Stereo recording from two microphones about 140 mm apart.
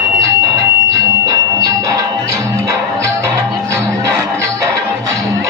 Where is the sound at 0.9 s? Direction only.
25° right (ahead or behind).